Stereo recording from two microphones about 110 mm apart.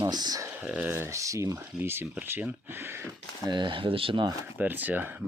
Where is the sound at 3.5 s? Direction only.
45° right (ahead or behind).